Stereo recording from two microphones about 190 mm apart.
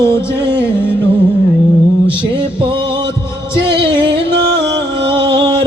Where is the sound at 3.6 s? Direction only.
60° right (ahead or behind).